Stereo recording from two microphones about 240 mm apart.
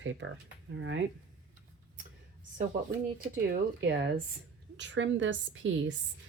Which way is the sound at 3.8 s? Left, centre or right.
Right.